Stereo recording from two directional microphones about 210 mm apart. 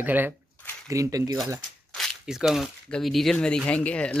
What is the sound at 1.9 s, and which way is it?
Speech, centre (ahead or behind).